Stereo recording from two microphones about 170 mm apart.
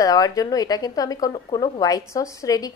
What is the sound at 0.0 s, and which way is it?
A woman's voice, 20° left (ahead or behind).